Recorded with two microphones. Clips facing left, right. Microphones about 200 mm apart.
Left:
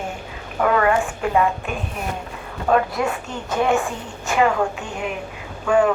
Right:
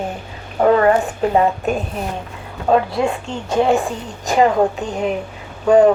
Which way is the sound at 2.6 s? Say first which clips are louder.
Right 3 dB; 25° right (ahead or behind).